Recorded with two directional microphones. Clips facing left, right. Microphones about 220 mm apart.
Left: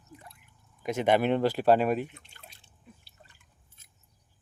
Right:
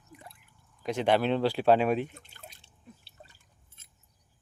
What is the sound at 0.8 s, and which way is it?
Speech, 10° left (ahead or behind).